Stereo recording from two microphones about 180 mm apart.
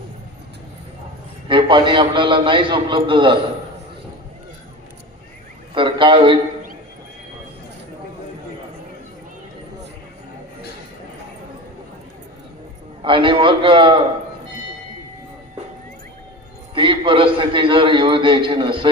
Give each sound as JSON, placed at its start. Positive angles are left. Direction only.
{"t": 1.5, "sound": "a man's voice", "side_deg": -25}
{"t": 5.7, "sound": "a man's voice", "side_deg": -30}
{"t": 13.0, "sound": "a man's voice", "side_deg": -30}
{"t": 16.7, "sound": "a man's voice", "side_deg": -30}